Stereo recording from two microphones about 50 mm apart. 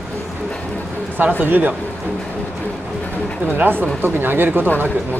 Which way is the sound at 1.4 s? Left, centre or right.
Right.